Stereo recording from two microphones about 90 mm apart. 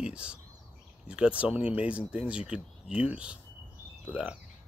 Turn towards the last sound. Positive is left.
turn(degrees=-15)  # may be behind; listen again after turning